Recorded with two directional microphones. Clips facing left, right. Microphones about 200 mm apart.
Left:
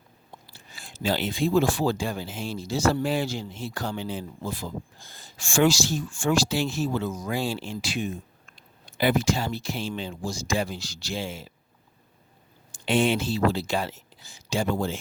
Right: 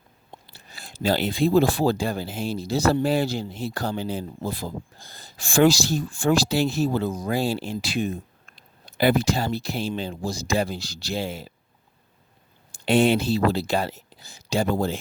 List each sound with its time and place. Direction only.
0.5 s speech: 35° right (ahead or behind)
12.7 s speech: 40° right (ahead or behind)